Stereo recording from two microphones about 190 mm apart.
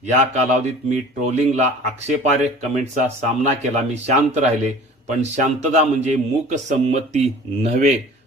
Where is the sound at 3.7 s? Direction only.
40° right (ahead or behind).